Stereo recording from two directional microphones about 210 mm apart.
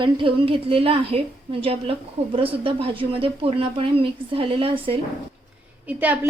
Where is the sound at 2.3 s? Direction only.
25° right (ahead or behind).